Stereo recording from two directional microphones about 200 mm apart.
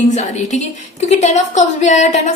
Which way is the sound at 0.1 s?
35° left (ahead or behind).